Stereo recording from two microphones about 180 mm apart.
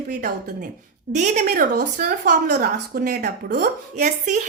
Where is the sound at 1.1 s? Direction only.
45° right (ahead or behind); by 3.7 s 60° right (ahead or behind).